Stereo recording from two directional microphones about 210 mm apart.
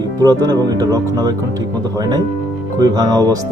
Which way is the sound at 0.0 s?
20° right (ahead or behind).